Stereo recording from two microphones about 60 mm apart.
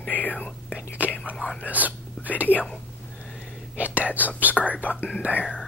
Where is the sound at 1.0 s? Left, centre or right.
Right.